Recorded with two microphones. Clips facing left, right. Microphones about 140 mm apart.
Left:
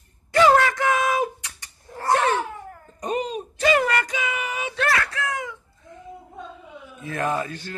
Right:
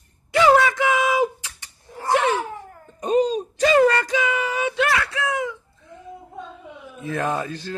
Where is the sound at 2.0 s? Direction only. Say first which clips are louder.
Right 1 dB; 5° right (ahead or behind).